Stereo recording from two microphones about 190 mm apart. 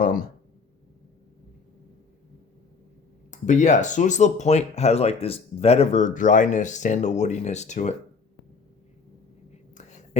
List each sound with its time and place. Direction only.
3.4 s speech: 40° left (ahead or behind)